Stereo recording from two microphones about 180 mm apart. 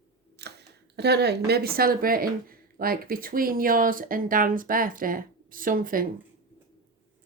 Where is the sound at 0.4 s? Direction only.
65° right (ahead or behind).